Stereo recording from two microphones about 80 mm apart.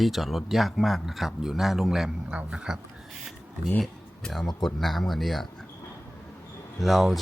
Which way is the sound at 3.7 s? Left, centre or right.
Centre.